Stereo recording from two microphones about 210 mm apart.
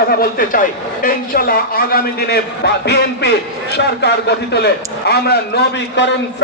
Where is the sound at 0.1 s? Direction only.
45° left (ahead or behind).